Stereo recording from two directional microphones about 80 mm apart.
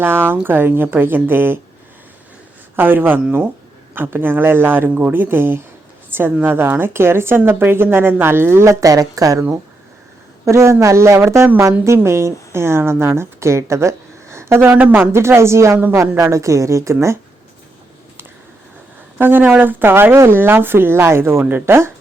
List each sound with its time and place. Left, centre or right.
0.0 s a woman's voice: right
2.7 s a woman's voice: right
10.4 s a woman's voice: right
14.7 s a woman's voice: right
19.2 s a woman's voice: right